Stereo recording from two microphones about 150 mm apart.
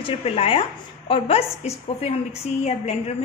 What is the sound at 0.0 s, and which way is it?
A woman's voice, 40° left (ahead or behind).